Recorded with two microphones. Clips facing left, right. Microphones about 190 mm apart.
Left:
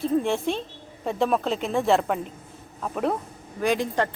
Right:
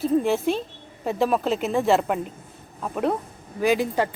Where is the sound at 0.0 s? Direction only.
5° right (ahead or behind).